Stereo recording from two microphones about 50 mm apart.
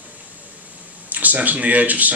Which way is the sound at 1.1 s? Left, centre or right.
Right.